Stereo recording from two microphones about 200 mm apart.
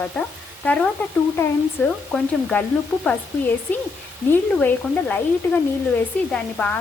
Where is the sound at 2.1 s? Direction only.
5° left (ahead or behind).